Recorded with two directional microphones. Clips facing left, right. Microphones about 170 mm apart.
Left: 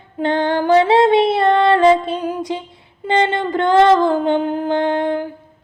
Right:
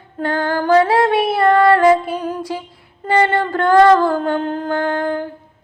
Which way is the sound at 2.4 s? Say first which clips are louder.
Left 1 dB; 20° left (ahead or behind).